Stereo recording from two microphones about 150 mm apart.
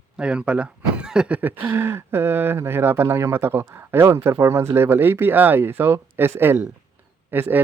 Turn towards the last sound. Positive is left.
turn(degrees=-15)  # may be behind; listen again after turning